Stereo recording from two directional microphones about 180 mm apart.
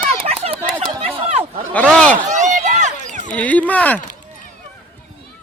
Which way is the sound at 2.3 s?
40° right (ahead or behind).